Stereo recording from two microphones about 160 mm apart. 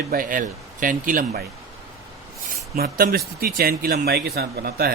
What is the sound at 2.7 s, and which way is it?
Speech, 70° right (ahead or behind).